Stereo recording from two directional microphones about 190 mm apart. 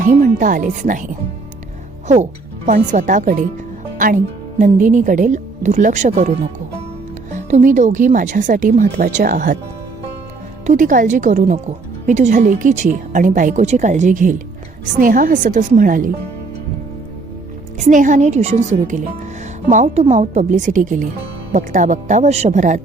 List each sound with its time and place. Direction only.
0.0 s a woman's voice: 45° right (ahead or behind)
2.9 s a woman's voice: 40° right (ahead or behind)
10.7 s a woman's voice: 45° right (ahead or behind)
17.7 s speech: 40° right (ahead or behind)